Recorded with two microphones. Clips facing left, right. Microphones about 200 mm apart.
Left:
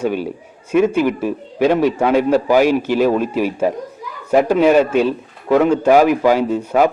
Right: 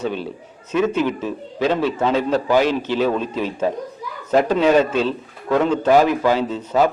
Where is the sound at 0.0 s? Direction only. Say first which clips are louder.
Left 5 dB; 10° left (ahead or behind).